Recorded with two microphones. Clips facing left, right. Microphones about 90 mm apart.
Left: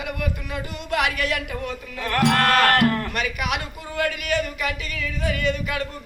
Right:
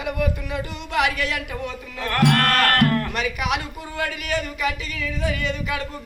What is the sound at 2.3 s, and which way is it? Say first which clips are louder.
Music: left 2 dB; 20° left (ahead or behind).